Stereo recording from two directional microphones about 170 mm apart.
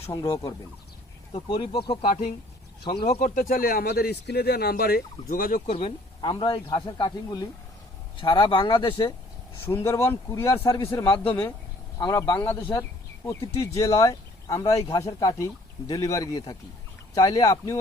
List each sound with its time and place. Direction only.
0.1 s speech: 20° left (ahead or behind)
1.3 s speech: 30° left (ahead or behind)
2.0 s speech: 45° left (ahead or behind)
5.7 s speech: 30° left (ahead or behind)
9.6 s speech: 15° left (ahead or behind)